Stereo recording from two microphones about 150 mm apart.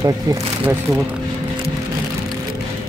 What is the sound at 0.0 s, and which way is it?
Speech, 20° right (ahead or behind).